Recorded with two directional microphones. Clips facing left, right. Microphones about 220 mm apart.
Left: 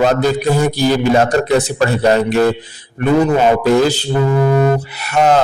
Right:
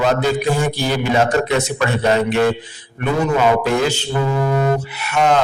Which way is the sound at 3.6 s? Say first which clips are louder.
Left 6 dB; 35° left (ahead or behind).